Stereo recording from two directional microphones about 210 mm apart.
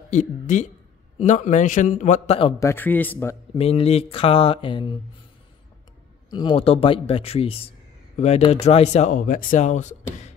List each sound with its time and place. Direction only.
0.1 s speech: 35° left (ahead or behind)
2.6 s speech: 10° left (ahead or behind)
3.5 s speech: 30° left (ahead or behind)
6.3 s speech: 25° left (ahead or behind)